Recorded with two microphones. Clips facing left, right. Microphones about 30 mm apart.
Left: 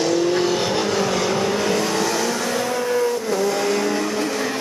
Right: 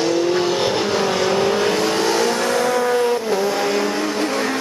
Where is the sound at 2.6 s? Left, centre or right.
Right.